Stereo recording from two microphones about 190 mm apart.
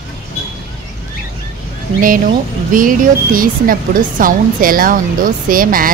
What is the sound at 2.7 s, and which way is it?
Speech, 45° right (ahead or behind).